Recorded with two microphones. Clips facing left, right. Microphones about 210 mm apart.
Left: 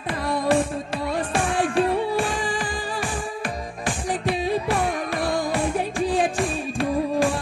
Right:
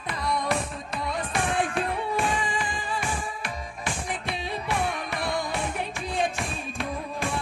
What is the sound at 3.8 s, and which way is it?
Music, 35° left (ahead or behind).